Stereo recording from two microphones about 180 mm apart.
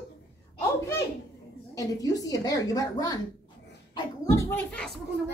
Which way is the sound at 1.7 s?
20° left (ahead or behind).